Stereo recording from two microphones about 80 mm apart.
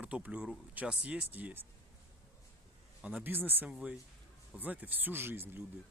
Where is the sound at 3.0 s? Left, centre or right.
Right.